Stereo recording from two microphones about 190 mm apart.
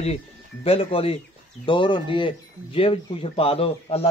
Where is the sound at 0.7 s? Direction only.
30° left (ahead or behind).